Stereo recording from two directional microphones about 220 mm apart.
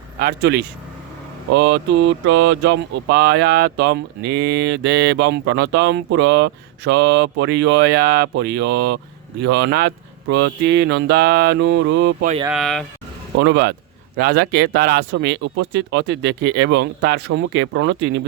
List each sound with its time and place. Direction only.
0.2 s speech: 45° right (ahead or behind)
12.5 s speech: centre (ahead or behind)
13.4 s speech: 50° right (ahead or behind)